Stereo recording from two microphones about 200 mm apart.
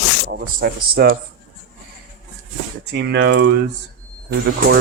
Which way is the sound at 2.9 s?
60° right (ahead or behind).